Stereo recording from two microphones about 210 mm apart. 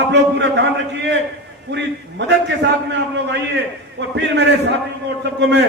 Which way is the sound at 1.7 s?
55° right (ahead or behind).